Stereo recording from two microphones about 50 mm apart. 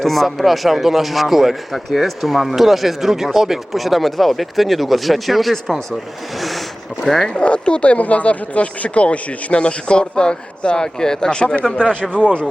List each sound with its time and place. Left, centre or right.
0.0 s a man's voice: centre
6.3 s a sound: centre
7.3 s speech: left